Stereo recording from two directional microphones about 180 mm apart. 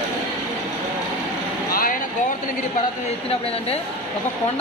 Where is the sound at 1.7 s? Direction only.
55° left (ahead or behind).